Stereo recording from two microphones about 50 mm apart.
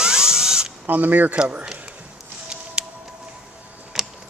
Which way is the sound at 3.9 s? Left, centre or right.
Centre.